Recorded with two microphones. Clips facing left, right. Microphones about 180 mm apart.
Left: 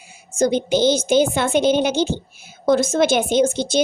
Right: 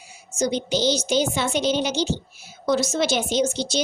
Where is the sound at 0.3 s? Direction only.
55° left (ahead or behind).